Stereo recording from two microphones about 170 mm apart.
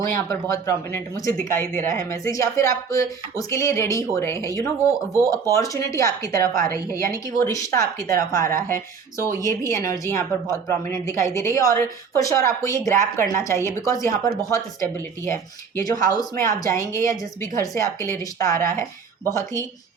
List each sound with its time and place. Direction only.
0.0 s a woman's voice: 20° left (ahead or behind)